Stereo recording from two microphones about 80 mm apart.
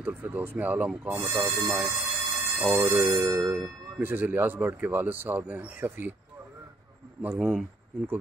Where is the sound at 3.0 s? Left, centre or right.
Right.